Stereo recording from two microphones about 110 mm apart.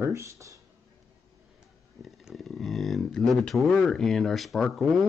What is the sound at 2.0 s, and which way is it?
Speech, centre (ahead or behind).